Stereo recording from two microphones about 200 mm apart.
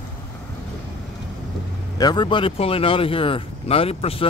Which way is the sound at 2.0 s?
20° left (ahead or behind).